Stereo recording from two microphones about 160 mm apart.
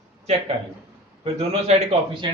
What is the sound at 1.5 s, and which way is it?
Speech, 40° right (ahead or behind).